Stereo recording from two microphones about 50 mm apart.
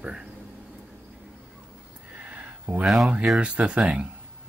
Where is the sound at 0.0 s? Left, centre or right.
Centre.